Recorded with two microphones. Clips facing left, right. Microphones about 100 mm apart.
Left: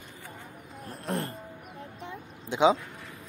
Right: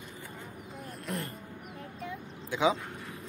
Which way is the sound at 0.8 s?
30° left (ahead or behind).